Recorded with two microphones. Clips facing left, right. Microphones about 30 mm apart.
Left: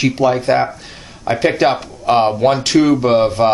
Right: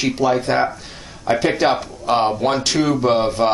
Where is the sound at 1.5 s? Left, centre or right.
Centre.